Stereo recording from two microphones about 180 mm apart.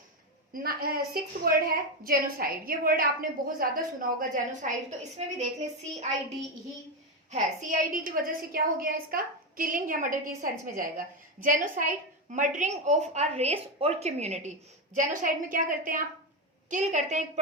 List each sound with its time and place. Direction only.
0.5 s a woman's voice: 55° right (ahead or behind)
4.2 s a woman's voice: 40° right (ahead or behind)
7.3 s a woman's voice: 45° right (ahead or behind)